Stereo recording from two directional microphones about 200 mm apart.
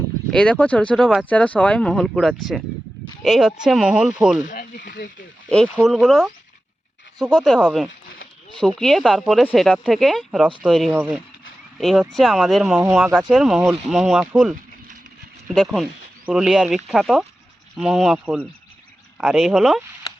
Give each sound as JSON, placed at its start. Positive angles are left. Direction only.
{"t": 0.3, "sound": "speech", "side_deg": 5}
{"t": 4.4, "sound": "a sound", "side_deg": 40}
{"t": 5.7, "sound": "speech", "side_deg": 0}
{"t": 7.3, "sound": "speech", "side_deg": 0}